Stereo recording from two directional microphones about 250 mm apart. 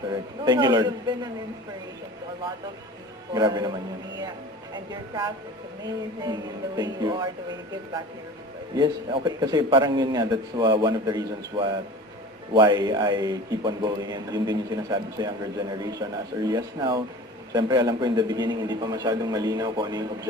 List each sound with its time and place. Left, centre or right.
0.1 s a man's voice: centre
3.3 s a man's voice: centre
8.7 s a man's voice: centre